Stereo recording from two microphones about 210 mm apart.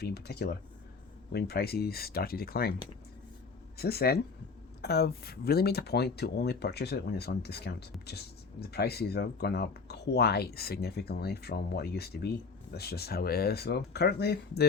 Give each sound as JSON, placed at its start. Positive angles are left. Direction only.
{"t": 0.0, "sound": "speech", "side_deg": 50}
{"t": 3.8, "sound": "speech", "side_deg": 50}